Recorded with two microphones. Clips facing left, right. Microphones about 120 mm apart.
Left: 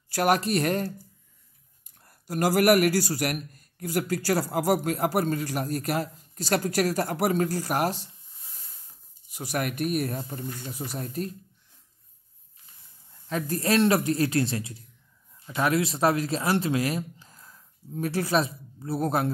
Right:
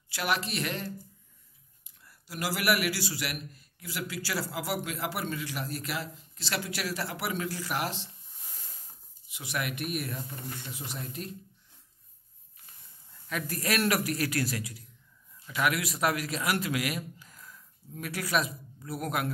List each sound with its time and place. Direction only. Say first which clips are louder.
0.1 s a man's voice: left 8 dB; 45° left (ahead or behind)
9.3 s speech: left 5 dB; 40° left (ahead or behind)
13.3 s speech: left 6 dB; 30° left (ahead or behind)